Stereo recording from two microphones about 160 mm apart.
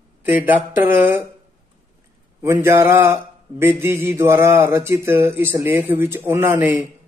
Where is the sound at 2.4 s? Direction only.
15° right (ahead or behind).